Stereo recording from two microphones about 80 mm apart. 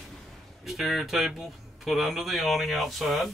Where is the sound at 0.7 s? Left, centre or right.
Centre.